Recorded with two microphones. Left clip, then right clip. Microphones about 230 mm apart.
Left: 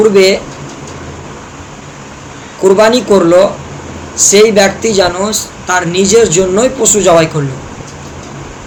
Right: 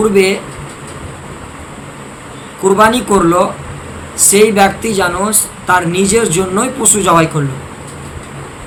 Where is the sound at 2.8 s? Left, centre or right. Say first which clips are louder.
Left 1 dB; centre.